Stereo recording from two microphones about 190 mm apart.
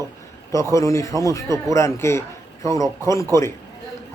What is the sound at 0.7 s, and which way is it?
A man's voice, 15° left (ahead or behind).